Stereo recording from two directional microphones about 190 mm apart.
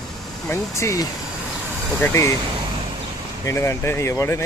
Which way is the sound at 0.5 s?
15° left (ahead or behind).